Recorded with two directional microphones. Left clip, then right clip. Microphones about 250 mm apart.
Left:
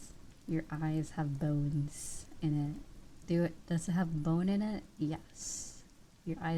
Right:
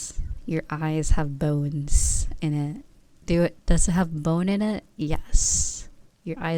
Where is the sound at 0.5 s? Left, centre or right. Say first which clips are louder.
Right 10 dB; right.